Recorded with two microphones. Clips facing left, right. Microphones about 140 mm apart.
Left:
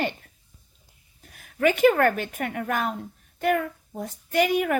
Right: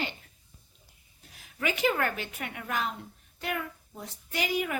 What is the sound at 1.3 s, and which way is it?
A child's voice, 55° left (ahead or behind).